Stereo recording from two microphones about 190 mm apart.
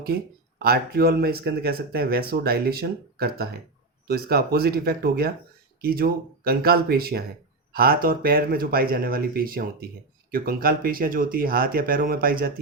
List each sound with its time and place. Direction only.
0.6 s speech: 55° right (ahead or behind)